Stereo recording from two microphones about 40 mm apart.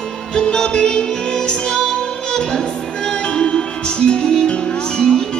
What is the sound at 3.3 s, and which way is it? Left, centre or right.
Music, left.